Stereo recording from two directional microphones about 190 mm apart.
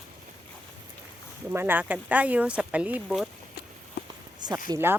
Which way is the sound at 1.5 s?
10° right (ahead or behind).